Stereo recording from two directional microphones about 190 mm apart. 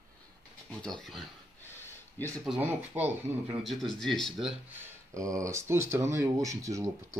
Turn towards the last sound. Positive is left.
turn(degrees=-15)  # may be behind; listen again after turning